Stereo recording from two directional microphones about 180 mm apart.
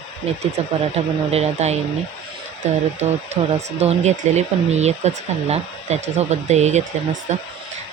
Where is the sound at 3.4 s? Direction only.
30° right (ahead or behind).